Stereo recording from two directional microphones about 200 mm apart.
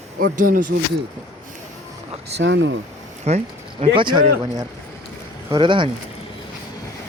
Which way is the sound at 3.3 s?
30° right (ahead or behind).